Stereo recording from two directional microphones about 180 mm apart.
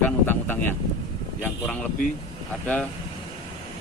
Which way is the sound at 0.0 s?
10° left (ahead or behind).